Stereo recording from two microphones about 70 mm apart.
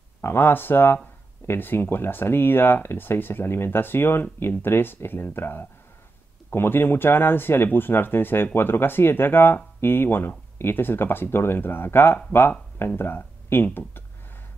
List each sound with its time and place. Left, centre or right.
0.2 s speech: left